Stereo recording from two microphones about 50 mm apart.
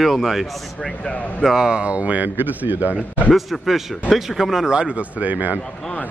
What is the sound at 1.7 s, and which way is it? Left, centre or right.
Speech, right.